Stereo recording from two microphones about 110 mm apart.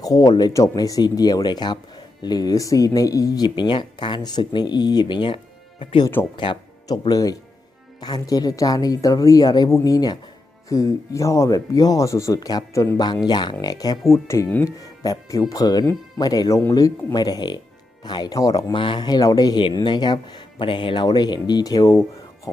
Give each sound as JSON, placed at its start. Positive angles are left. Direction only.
{"t": 0.0, "sound": "speech", "side_deg": 35}
{"t": 7.1, "sound": "speech", "side_deg": 35}
{"t": 14.1, "sound": "speech", "side_deg": 25}
{"t": 18.7, "sound": "speech", "side_deg": 50}